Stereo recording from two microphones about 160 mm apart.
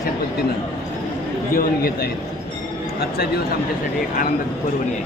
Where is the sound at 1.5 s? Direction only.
70° left (ahead or behind).